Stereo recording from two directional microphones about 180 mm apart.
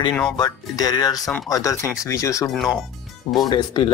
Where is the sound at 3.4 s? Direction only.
25° left (ahead or behind).